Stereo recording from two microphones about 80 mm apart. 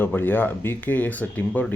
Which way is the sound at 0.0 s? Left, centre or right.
Left.